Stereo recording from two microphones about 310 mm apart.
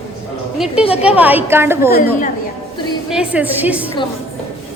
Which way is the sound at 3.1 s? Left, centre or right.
Centre.